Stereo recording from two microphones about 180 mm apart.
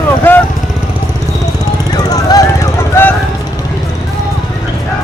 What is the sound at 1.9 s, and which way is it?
Vehicle, 20° left (ahead or behind).